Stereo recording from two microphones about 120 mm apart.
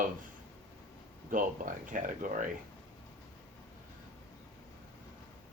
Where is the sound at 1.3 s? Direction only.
90° right.